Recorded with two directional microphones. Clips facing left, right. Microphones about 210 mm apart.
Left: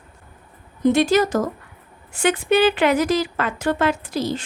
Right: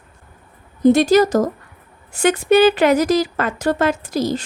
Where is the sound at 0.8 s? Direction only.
40° right (ahead or behind).